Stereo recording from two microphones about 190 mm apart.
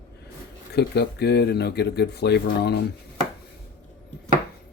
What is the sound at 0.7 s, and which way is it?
Speech, 60° left (ahead or behind).